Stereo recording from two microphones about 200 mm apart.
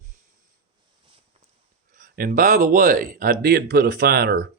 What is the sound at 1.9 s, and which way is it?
Speech, 40° right (ahead or behind).